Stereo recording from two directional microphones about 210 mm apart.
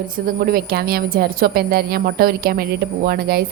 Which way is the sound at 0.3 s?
45° right (ahead or behind).